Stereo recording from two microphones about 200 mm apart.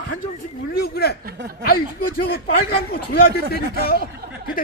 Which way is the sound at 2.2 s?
50° left (ahead or behind).